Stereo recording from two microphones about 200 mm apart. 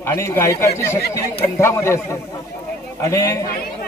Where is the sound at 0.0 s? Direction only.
15° left (ahead or behind).